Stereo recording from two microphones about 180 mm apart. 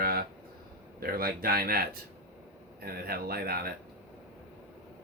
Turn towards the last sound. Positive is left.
turn(degrees=-60)  # may be behind; listen again after turning